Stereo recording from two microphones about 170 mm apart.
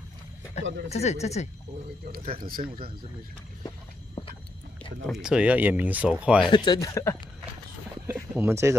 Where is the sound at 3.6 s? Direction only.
25° left (ahead or behind).